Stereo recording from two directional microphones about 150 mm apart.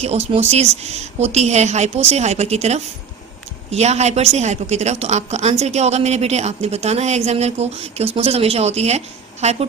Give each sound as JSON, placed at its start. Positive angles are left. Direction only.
{"t": 0.3, "sound": "a woman's voice", "side_deg": -45}